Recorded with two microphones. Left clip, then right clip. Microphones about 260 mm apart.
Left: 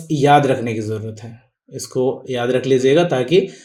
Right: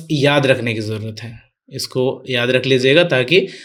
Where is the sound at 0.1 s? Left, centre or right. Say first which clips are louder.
Left 1 dB; right.